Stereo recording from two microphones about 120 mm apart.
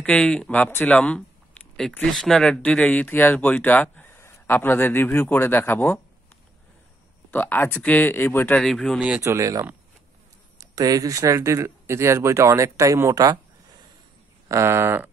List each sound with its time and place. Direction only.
0.0 s speech: 10° left (ahead or behind)
7.2 s speech: 15° left (ahead or behind)
8.5 s speech: 5° left (ahead or behind)
9.2 s speech: 25° right (ahead or behind)
14.5 s speech: 20° right (ahead or behind)